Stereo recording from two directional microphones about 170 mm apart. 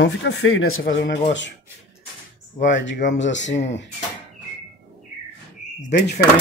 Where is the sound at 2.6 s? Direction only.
90° left.